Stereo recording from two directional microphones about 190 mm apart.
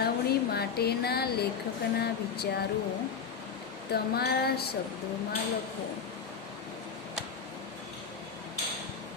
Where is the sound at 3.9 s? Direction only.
55° left (ahead or behind).